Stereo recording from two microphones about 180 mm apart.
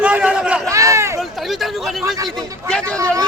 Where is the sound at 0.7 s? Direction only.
15° right (ahead or behind).